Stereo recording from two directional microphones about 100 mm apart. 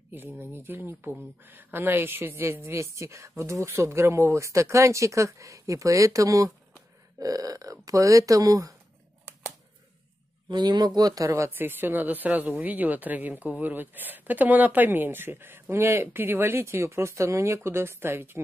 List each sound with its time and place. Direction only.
0.3 s speech: 25° right (ahead or behind)
10.5 s speech: 45° right (ahead or behind); by 18.4 s 20° right (ahead or behind)